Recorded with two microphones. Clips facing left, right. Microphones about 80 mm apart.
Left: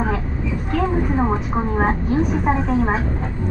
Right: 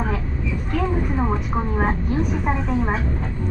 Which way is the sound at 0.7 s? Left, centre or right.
Left.